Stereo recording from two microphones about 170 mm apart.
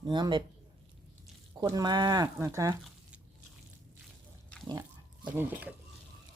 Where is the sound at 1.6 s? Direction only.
25° right (ahead or behind).